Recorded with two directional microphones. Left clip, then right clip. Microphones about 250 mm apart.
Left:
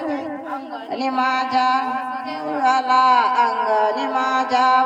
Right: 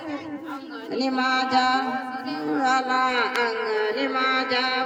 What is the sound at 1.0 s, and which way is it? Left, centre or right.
Music, centre.